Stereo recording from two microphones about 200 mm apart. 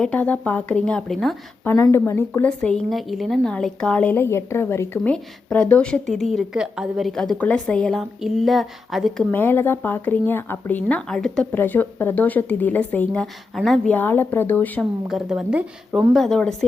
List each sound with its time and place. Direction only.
0.0 s speech: 5° left (ahead or behind)
1.7 s speech: 10° left (ahead or behind)
9.3 s speech: 10° left (ahead or behind)
15.0 s speech: centre (ahead or behind)